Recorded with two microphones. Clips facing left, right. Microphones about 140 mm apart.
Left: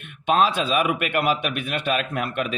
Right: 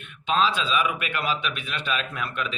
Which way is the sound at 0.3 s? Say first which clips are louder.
Left 4 dB; 55° left (ahead or behind).